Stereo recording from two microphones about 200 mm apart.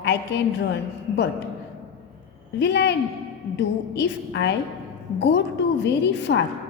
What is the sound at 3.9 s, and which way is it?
A woman's voice, 60° left (ahead or behind).